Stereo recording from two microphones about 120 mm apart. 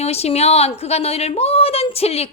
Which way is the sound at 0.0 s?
60° left (ahead or behind).